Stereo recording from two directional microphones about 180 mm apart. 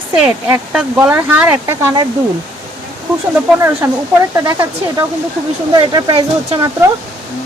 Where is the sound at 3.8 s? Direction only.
15° right (ahead or behind).